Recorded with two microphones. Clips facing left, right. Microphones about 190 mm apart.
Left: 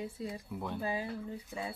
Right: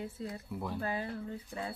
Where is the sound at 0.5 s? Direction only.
Centre (ahead or behind).